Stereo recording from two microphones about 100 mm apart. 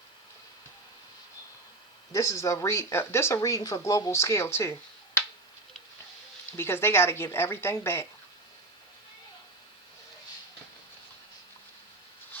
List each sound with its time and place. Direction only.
2.1 s speech: 30° left (ahead or behind)
6.6 s speech: 25° left (ahead or behind)